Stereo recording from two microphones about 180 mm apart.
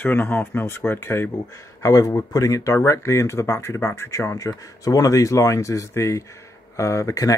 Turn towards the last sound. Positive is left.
turn(degrees=20)  # may be behind; listen again after turning